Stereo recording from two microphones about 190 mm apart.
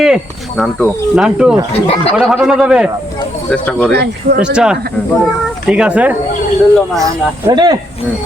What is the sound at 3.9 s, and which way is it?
Speech, 60° right (ahead or behind).